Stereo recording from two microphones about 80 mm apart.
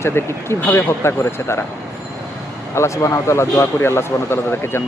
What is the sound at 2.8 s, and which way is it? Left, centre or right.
Speech, left.